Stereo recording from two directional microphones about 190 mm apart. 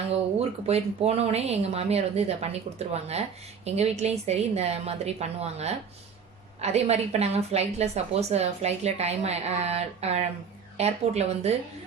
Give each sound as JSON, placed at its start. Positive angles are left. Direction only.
{"t": 0.3, "sound": "speech", "side_deg": -35}